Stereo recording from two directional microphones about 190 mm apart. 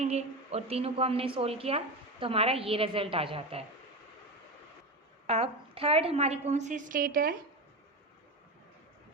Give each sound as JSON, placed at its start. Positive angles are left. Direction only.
{"t": 0.0, "sound": "a woman's voice", "side_deg": -35}
{"t": 5.2, "sound": "a woman's voice", "side_deg": -30}